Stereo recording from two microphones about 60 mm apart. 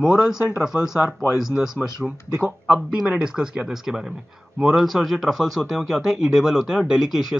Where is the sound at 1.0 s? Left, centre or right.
Left.